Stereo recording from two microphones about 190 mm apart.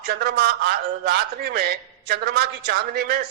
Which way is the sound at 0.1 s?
55° right (ahead or behind).